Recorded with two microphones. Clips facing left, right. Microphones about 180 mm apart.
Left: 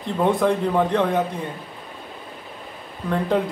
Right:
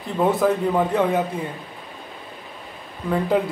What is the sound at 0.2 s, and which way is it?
A man's voice, 5° right (ahead or behind).